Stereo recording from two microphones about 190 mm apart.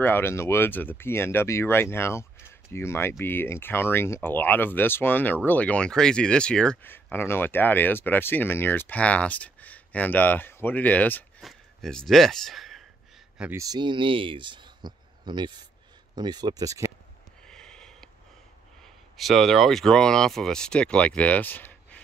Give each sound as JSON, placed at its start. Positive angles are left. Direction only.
{"t": 0.0, "sound": "speech", "side_deg": 10}
{"t": 13.4, "sound": "speech", "side_deg": -15}
{"t": 17.5, "sound": "a sound", "side_deg": 5}
{"t": 19.1, "sound": "speech", "side_deg": 0}